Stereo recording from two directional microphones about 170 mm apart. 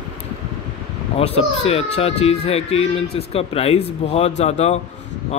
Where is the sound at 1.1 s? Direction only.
35° left (ahead or behind).